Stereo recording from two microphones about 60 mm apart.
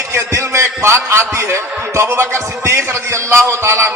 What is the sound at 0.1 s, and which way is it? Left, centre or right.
A man's voice, right.